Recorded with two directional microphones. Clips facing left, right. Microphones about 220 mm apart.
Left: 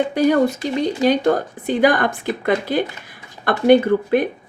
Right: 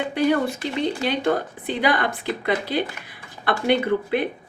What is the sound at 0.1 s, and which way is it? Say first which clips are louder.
Speech: left 5 dB; 40° left (ahead or behind).